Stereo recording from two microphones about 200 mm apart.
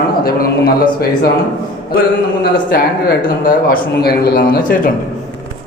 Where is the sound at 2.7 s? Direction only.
45° left (ahead or behind).